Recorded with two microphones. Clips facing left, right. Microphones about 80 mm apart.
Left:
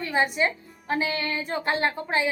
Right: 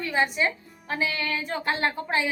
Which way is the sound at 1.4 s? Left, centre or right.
Left.